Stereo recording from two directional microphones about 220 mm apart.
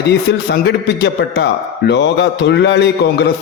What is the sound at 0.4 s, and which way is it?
A man's voice, 50° left (ahead or behind).